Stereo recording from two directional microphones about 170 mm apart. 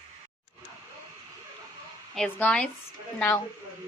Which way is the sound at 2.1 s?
5° left (ahead or behind).